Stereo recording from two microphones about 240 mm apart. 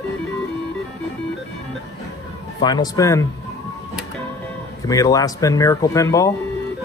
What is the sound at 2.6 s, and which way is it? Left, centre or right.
Speech, centre.